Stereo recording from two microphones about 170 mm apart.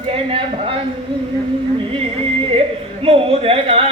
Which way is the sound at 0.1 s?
35° right (ahead or behind).